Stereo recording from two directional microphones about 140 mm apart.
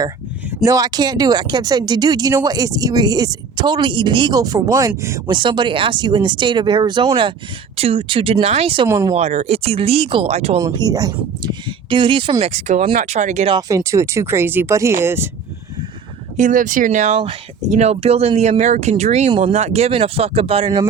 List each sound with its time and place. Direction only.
0.6 s speech: 25° right (ahead or behind)
5.3 s speech: 35° right (ahead or behind)
8.9 s speech: 20° right (ahead or behind)
9.1 s speech: 50° right (ahead or behind)
10.6 s speech: 30° right (ahead or behind); by 13.5 s 55° right (ahead or behind)
13.5 s speech: 25° right (ahead or behind)
16.4 s speech: 70° right (ahead or behind); by 20.8 s 40° right (ahead or behind)